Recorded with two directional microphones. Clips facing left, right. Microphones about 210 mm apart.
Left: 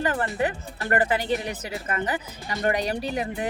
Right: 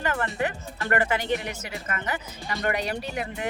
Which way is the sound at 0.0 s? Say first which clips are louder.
Left 2 dB; 35° left (ahead or behind).